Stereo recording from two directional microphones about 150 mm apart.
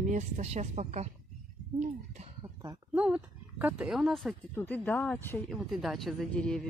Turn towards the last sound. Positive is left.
turn(degrees=5)  # may be behind; listen again after turning